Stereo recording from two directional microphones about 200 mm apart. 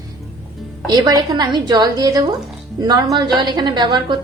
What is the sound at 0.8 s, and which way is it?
Speech, 20° right (ahead or behind).